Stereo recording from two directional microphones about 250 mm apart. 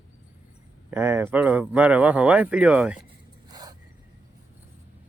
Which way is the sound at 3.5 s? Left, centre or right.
Centre.